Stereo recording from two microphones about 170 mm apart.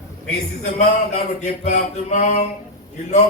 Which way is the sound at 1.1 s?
45° left (ahead or behind).